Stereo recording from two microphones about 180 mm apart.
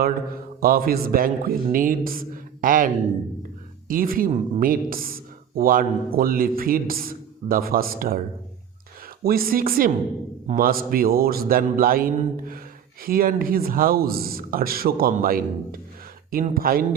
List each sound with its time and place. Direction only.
0.6 s a man's voice: 55° right (ahead or behind)
9.2 s a man's voice: 55° right (ahead or behind)